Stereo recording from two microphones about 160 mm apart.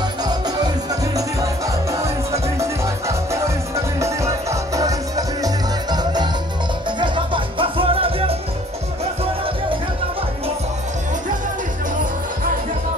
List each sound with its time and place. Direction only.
0.2 s music: 25° right (ahead or behind)